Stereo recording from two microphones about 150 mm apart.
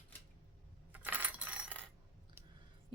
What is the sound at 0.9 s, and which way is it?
Coin, 10° right (ahead or behind).